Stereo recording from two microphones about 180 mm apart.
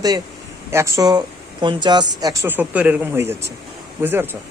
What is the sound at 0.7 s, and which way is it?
Speech, 15° right (ahead or behind).